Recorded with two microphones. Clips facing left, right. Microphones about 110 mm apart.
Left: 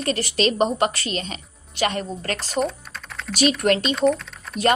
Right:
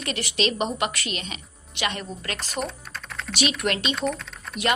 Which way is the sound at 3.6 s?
35° left (ahead or behind).